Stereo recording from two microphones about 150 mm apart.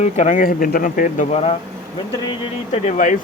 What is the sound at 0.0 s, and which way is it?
Speech, 55° left (ahead or behind).